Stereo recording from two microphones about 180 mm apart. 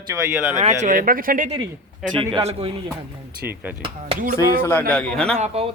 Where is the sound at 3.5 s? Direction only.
10° right (ahead or behind).